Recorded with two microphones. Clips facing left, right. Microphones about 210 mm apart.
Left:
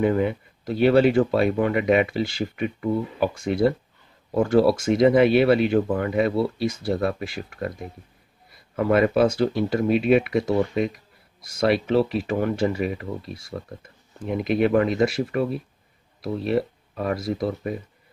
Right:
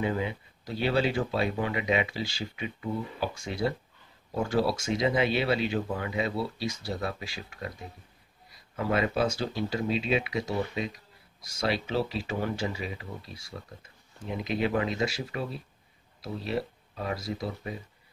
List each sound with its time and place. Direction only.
0.0 s speech: 55° left (ahead or behind)